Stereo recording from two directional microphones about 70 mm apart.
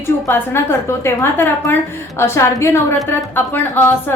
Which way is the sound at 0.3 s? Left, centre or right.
Left.